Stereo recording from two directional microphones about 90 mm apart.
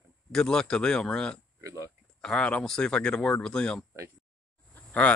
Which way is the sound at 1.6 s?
35° right (ahead or behind).